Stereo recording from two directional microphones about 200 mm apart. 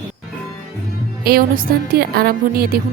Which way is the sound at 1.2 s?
50° right (ahead or behind).